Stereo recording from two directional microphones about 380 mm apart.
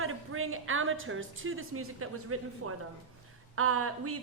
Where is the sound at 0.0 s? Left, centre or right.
Right.